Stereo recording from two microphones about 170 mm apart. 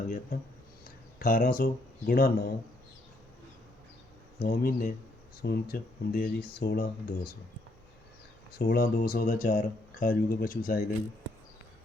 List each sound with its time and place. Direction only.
0.3 s speech: 60° left (ahead or behind)
4.4 s speech: 60° left (ahead or behind)
8.5 s speech: 65° left (ahead or behind)